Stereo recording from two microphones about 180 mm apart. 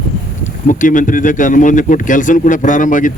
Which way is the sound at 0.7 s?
45° left (ahead or behind).